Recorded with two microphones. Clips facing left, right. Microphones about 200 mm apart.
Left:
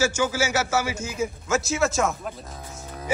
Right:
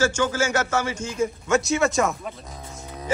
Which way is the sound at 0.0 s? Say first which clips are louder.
Right 1 dB; 10° left (ahead or behind).